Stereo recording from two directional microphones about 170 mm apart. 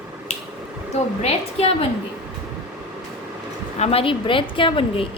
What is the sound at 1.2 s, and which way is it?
Speech, 35° left (ahead or behind).